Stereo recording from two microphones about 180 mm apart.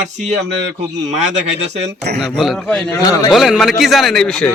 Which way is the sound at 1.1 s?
40° right (ahead or behind).